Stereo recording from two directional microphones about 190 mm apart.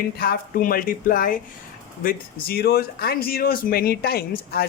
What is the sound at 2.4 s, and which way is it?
Speech, 55° left (ahead or behind).